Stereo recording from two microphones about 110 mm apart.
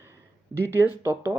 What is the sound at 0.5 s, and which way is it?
Speech, 20° right (ahead or behind).